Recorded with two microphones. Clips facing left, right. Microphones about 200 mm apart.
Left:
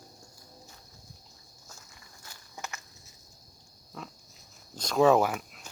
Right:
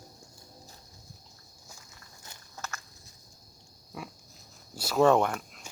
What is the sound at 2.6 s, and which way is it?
Walk, 15° left (ahead or behind).